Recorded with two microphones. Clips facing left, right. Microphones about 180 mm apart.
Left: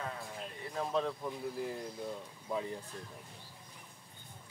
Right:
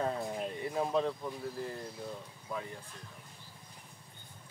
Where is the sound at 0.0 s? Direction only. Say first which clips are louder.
Right 8 dB; 35° right (ahead or behind).